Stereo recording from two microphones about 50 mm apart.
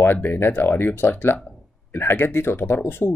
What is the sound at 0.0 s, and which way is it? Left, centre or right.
Speech, left.